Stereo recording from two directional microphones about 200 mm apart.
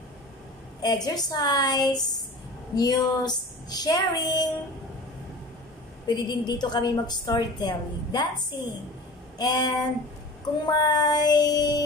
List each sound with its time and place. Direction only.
0.8 s a woman's voice: 20° left (ahead or behind)
6.0 s a woman's voice: 20° left (ahead or behind)
9.4 s a woman's voice: 20° left (ahead or behind)